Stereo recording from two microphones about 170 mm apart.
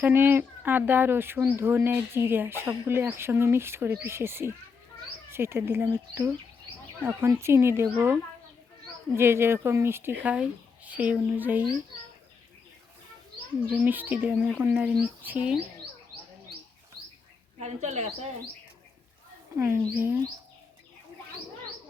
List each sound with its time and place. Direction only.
0.0 s speech: 10° right (ahead or behind)
13.7 s speech: 10° right (ahead or behind)
17.6 s speech: 40° right (ahead or behind)
19.5 s speech: 15° right (ahead or behind)